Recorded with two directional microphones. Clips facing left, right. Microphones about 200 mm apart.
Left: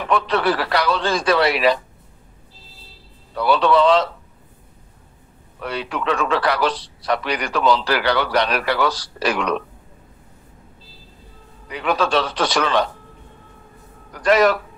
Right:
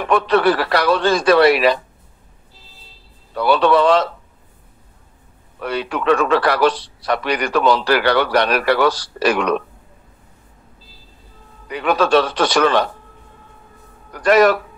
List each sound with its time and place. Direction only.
0.0 s a man's voice: 55° right (ahead or behind)
3.3 s a man's voice: 60° right (ahead or behind)
5.6 s a man's voice: 60° right (ahead or behind)
11.7 s a man's voice: 55° right (ahead or behind)
14.1 s a man's voice: 55° right (ahead or behind)